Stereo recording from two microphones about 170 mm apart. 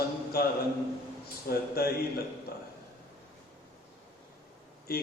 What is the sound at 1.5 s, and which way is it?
Speech, 65° left (ahead or behind).